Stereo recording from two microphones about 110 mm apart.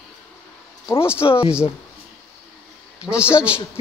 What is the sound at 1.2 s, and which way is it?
Speech, 45° left (ahead or behind).